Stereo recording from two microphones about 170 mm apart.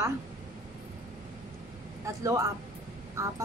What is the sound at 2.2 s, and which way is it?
A woman's voice, 20° right (ahead or behind).